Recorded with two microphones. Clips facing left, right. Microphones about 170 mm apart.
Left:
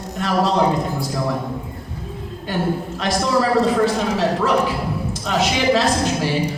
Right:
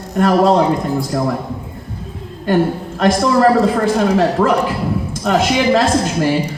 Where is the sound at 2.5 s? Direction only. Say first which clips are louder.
Right 7 dB; 55° right (ahead or behind).